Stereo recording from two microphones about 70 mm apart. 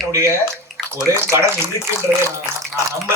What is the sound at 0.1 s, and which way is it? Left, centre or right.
A man's voice, right.